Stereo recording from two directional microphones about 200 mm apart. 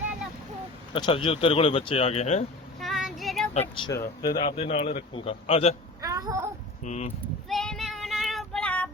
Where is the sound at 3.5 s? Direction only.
30° left (ahead or behind).